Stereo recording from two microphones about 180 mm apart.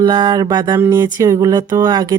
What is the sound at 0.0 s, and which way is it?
Speech, 25° right (ahead or behind).